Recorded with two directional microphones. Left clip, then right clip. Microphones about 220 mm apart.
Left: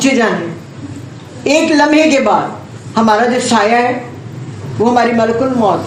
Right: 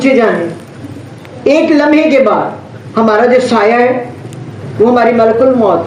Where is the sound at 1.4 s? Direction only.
35° left (ahead or behind).